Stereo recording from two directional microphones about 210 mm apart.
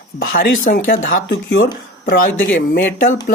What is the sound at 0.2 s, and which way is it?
Speech, 45° left (ahead or behind).